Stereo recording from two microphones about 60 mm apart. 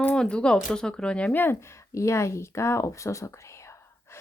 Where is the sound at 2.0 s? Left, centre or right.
Left.